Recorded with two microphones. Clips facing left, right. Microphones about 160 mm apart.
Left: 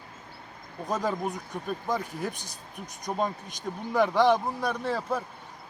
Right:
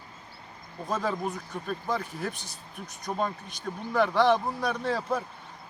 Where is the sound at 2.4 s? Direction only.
20° left (ahead or behind).